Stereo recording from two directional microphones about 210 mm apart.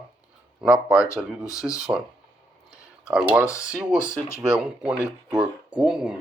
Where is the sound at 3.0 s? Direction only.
5° right (ahead or behind).